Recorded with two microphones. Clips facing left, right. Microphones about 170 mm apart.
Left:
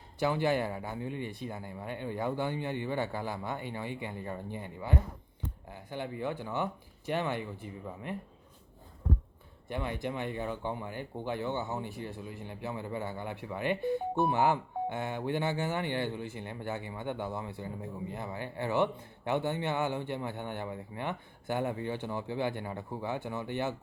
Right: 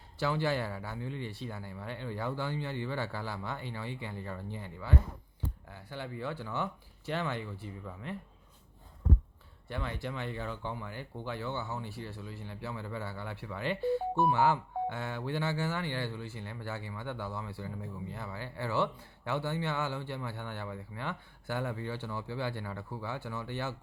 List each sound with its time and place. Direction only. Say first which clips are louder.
0.2 s speech: left 3 dB; 15° left (ahead or behind)
9.6 s a man's voice: left 3 dB; 15° left (ahead or behind)